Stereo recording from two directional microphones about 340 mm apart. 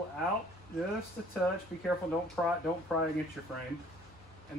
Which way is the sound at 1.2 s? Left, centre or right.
Centre.